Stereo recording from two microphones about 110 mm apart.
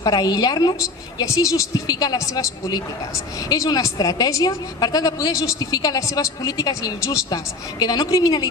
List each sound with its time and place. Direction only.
0.0 s a woman's voice: 35° left (ahead or behind)